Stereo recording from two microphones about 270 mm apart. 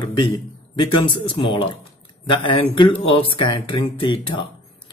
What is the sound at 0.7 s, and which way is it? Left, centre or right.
Speech, centre.